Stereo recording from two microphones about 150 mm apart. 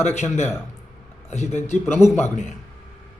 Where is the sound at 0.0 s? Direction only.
50° left (ahead or behind).